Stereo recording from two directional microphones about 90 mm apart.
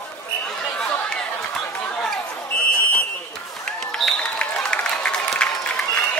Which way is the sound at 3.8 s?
5° left (ahead or behind).